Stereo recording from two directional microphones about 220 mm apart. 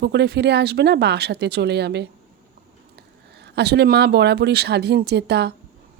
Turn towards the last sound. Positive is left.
turn(degrees=-50)  # may be behind; listen again after turning